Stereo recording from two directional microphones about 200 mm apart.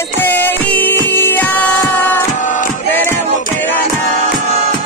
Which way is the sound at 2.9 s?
10° left (ahead or behind).